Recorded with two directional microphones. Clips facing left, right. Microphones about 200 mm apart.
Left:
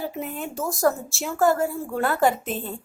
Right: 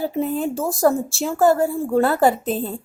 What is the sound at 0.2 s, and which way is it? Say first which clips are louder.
A woman's voice: right 8 dB; 35° right (ahead or behind).